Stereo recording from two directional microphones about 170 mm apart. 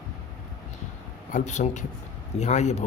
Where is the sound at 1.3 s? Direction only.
45° left (ahead or behind).